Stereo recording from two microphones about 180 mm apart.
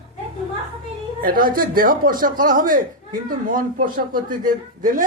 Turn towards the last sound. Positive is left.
turn(degrees=-50)  # may be behind; listen again after turning